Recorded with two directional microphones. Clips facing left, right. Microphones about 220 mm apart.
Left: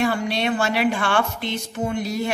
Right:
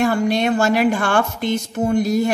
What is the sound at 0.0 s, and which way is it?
Speech, 45° right (ahead or behind).